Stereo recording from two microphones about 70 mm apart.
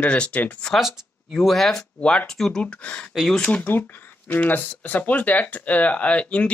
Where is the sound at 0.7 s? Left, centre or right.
Centre.